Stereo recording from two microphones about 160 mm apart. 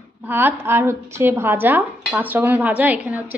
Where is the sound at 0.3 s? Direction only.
10° right (ahead or behind).